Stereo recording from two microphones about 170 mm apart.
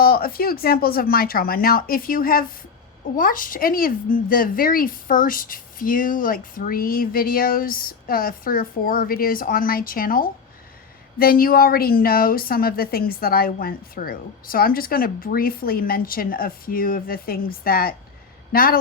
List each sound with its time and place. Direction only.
0.0 s a woman's voice: 60° left (ahead or behind)